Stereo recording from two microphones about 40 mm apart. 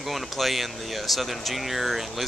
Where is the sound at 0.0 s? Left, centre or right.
Centre.